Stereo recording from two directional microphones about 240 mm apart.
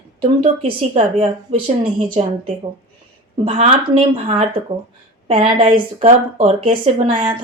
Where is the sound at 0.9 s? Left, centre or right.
Right.